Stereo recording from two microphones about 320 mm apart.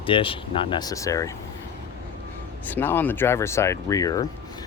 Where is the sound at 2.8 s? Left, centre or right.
Centre.